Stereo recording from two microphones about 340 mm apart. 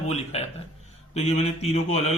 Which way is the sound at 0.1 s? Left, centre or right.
Centre.